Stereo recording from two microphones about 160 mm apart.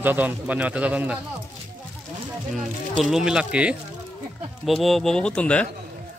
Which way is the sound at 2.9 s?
Centre (ahead or behind).